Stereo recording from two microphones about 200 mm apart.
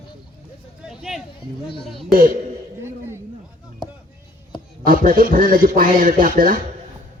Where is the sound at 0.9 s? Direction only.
Centre (ahead or behind).